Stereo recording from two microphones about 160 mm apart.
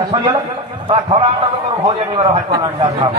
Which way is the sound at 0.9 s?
30° right (ahead or behind).